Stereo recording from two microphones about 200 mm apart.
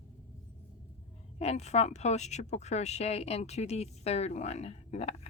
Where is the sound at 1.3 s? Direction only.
30° left (ahead or behind).